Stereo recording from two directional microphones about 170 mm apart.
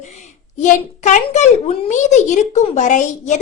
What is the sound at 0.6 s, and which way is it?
A child's voice, 45° left (ahead or behind).